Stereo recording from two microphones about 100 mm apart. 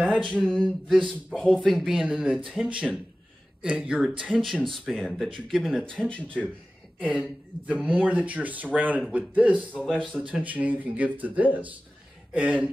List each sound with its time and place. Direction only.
0.1 s speech: 10° left (ahead or behind); by 4.1 s 10° right (ahead or behind)
4.5 s speech: 5° left (ahead or behind)
7.0 s a woman's voice: 15° right (ahead or behind)
9.6 s speech: 10° left (ahead or behind)
10.2 s speech: 15° right (ahead or behind)